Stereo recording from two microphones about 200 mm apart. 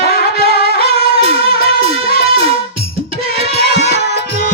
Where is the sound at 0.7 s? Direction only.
30° right (ahead or behind).